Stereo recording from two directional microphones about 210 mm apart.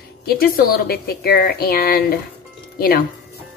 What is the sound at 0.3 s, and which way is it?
A woman's voice, 45° left (ahead or behind).